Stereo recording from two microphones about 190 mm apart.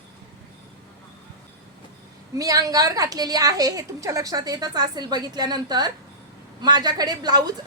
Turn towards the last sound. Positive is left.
turn(degrees=-20)  # may be behind; listen again after turning